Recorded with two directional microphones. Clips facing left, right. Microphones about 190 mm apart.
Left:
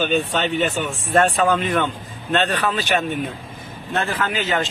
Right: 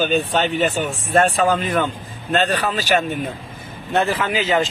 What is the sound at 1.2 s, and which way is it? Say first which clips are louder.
A man's voice: right 1 dB; 35° right (ahead or behind).